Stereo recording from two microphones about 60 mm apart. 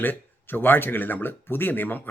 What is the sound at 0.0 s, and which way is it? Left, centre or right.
Speech, left.